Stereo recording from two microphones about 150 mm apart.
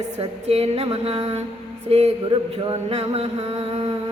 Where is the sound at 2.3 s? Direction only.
35° right (ahead or behind).